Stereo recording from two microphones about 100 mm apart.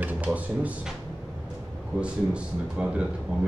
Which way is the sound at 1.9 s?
10° right (ahead or behind).